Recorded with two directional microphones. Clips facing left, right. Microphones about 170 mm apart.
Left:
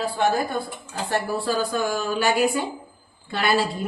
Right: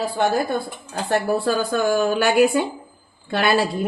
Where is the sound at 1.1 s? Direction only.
60° right (ahead or behind).